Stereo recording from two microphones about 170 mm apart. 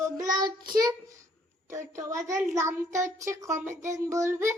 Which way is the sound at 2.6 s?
15° right (ahead or behind).